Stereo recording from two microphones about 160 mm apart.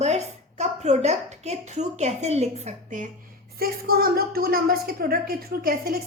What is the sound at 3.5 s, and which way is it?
A woman's voice, 70° right (ahead or behind).